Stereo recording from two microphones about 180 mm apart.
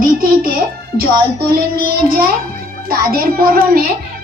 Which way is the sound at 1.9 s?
55° right (ahead or behind).